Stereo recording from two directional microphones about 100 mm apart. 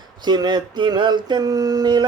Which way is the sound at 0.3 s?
45° right (ahead or behind).